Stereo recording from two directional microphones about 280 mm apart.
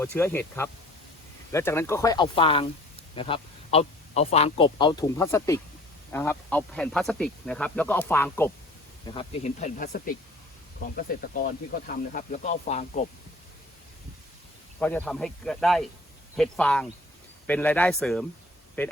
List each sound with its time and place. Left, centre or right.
0.0 s speech: centre
9.0 s speech: left
14.8 s speech: centre